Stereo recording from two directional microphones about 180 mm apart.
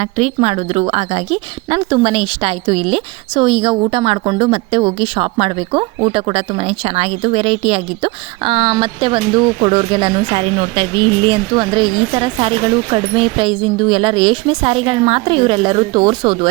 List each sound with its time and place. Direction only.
0.0 s a woman's voice: 35° right (ahead or behind)